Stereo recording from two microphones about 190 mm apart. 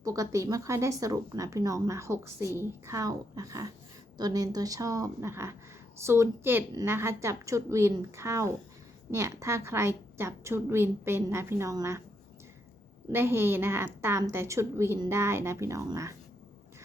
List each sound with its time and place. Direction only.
0.0 s speech: 15° right (ahead or behind)
13.1 s speech: 10° right (ahead or behind)